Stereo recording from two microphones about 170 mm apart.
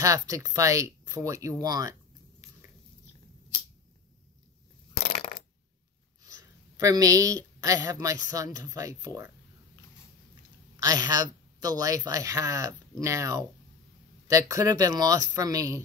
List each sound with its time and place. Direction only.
0.0 s speech: 20° right (ahead or behind)
6.8 s speech: 20° right (ahead or behind)
10.8 s speech: 20° right (ahead or behind)